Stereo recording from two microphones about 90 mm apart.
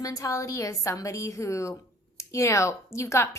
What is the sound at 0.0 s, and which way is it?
A woman's voice, 40° left (ahead or behind).